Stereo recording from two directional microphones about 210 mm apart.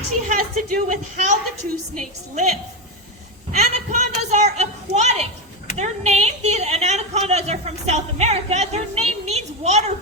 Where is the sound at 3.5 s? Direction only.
35° right (ahead or behind).